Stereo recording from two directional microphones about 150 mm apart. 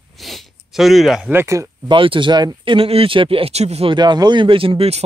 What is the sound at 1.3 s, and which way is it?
Speech, 20° right (ahead or behind).